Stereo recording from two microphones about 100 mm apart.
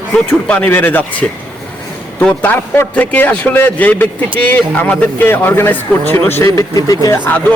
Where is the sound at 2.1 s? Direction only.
15° left (ahead or behind).